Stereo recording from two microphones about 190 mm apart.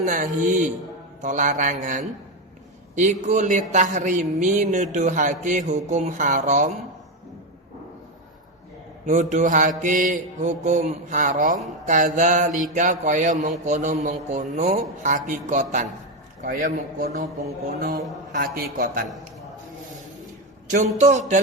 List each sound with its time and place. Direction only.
0.0 s a man's voice: 45° right (ahead or behind)
9.0 s a man's voice: 40° right (ahead or behind)
20.7 s a man's voice: 40° right (ahead or behind)